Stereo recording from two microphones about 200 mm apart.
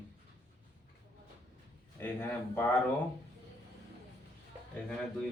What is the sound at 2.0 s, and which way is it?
Speech, 10° left (ahead or behind).